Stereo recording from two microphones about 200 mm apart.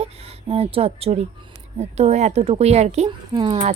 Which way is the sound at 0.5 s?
30° right (ahead or behind).